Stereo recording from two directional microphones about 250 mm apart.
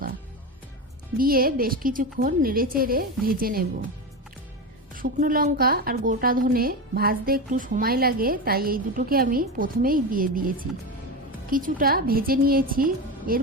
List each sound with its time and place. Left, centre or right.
1.2 s a woman's voice: right
4.9 s a woman's voice: right